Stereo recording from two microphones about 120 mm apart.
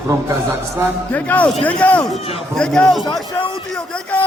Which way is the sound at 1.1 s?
15° left (ahead or behind).